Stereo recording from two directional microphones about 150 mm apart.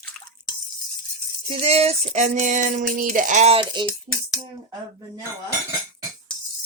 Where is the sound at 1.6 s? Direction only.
45° right (ahead or behind).